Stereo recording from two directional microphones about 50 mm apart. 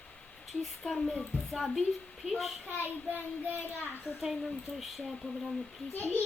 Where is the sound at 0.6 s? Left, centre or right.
Centre.